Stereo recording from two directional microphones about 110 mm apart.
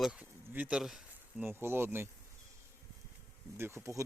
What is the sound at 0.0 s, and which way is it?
Insect, 10° right (ahead or behind).